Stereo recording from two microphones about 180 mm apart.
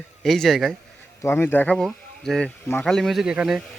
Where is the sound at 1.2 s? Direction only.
15° left (ahead or behind); by 3.6 s 5° right (ahead or behind).